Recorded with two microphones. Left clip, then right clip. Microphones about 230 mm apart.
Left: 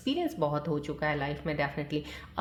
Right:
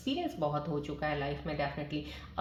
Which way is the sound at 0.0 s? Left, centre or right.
Left.